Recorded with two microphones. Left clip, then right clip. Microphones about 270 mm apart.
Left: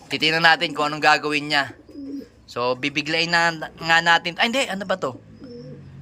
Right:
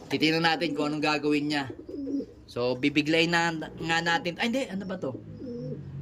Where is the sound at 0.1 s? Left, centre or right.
Centre.